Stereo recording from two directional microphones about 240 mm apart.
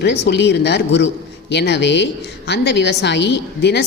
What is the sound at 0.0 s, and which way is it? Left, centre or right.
A woman's voice, left.